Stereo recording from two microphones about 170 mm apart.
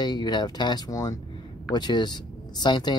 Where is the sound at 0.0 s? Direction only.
25° left (ahead or behind).